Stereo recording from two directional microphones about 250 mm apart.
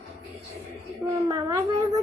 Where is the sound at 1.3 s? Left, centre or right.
Centre.